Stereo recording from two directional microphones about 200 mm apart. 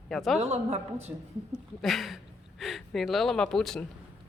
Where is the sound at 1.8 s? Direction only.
Centre (ahead or behind).